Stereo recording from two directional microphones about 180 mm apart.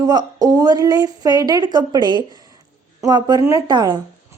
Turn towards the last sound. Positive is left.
turn(degrees=-25)  # may be behind; listen again after turning